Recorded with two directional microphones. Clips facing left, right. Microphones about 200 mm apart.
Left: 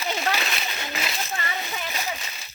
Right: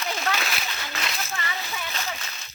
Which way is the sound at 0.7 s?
25° left (ahead or behind).